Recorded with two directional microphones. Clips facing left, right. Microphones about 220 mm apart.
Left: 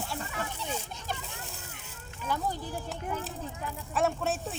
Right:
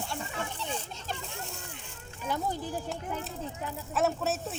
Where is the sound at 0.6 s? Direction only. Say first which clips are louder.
Even; 10° left (ahead or behind).